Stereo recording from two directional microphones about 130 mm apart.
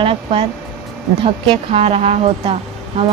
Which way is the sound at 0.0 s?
45° right (ahead or behind).